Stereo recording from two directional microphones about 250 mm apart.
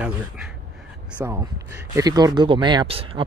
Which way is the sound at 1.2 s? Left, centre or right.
Centre.